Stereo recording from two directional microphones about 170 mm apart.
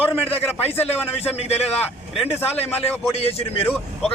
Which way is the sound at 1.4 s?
40° left (ahead or behind).